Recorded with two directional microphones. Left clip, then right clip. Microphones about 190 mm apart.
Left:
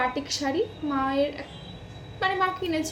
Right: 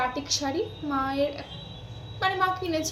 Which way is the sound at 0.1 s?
25° left (ahead or behind).